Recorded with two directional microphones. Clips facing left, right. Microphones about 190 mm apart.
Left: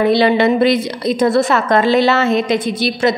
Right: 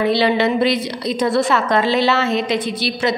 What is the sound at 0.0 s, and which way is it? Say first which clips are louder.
A woman's voice: left 4 dB; 50° left (ahead or behind).